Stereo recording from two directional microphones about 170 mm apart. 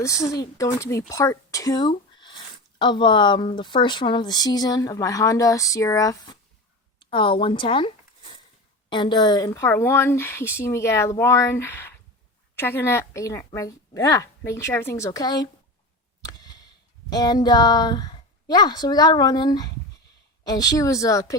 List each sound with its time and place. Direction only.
0.0 s speech: 20° left (ahead or behind)
16.2 s a sound: 25° left (ahead or behind)
17.1 s speech: 25° left (ahead or behind)